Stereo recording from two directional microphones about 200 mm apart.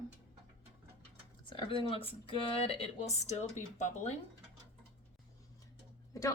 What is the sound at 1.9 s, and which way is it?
Speech, 30° left (ahead or behind).